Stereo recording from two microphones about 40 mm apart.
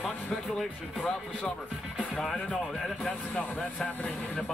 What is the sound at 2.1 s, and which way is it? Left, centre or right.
Speech, left.